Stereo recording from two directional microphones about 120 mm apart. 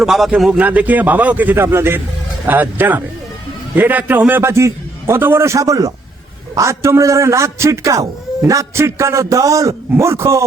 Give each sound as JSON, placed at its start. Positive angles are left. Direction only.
{"t": 0.0, "sound": "a man's voice", "side_deg": -5}